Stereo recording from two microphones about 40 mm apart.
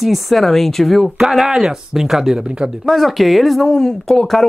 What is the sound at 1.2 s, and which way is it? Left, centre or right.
Speech, centre.